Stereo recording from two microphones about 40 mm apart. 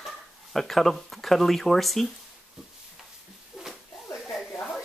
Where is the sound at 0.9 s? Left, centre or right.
Centre.